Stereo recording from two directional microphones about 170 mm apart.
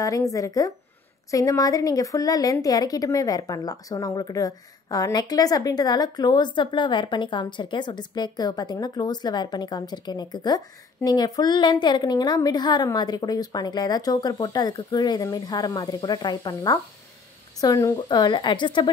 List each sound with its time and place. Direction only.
0.0 s speech: 20° left (ahead or behind)